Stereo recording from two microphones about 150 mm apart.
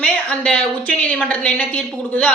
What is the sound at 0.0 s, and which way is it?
A woman's voice, 10° left (ahead or behind).